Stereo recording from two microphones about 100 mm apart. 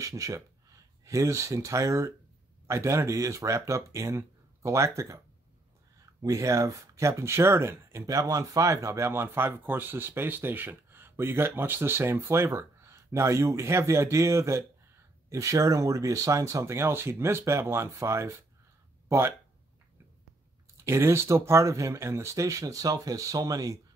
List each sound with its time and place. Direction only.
0.0 s speech: 35° right (ahead or behind)
6.2 s speech: 30° right (ahead or behind)
20.8 s speech: 30° right (ahead or behind)